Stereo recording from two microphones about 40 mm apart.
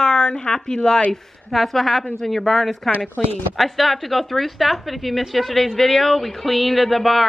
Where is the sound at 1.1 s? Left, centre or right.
Centre.